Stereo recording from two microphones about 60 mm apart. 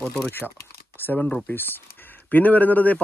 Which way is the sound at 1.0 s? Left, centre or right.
Left.